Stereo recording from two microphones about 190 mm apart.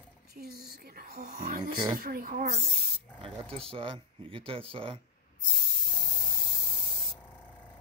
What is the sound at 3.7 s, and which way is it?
Speech, 30° right (ahead or behind).